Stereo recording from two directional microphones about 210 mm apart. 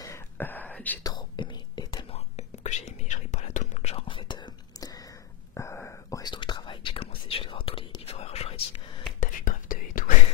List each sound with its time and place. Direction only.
0.0 s a sound: 10° left (ahead or behind)
1.0 s whispering: 20° left (ahead or behind)
9.2 s whispering: 40° left (ahead or behind)